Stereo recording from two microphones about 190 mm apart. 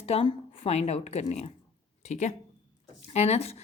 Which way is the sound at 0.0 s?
30° left (ahead or behind).